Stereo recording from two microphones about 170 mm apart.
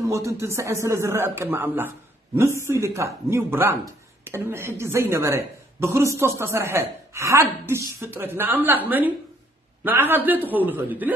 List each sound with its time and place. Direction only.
0.0 s speech: 15° right (ahead or behind)